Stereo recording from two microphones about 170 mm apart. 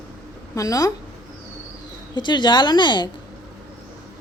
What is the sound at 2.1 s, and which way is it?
Speech, 25° left (ahead or behind).